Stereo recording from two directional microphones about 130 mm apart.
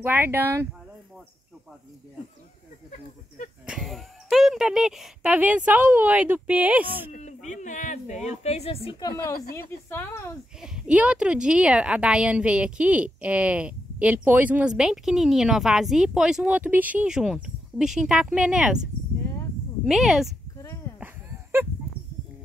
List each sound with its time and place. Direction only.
0.0 s a woman's voice: 15° right (ahead or behind)
3.6 s a woman's voice: 5° right (ahead or behind)
7.1 s speech: 65° left (ahead or behind); by 8.9 s 50° left (ahead or behind)
9.0 s a woman's voice: 25° left (ahead or behind)
10.6 s a woman's voice: 5° right (ahead or behind)
19.8 s speech: 5° right (ahead or behind)
20.5 s a sound: 25° left (ahead or behind)
21.0 s a sound: 15° right (ahead or behind)